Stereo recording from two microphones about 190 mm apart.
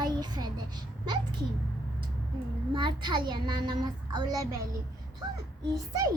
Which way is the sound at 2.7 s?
25° right (ahead or behind).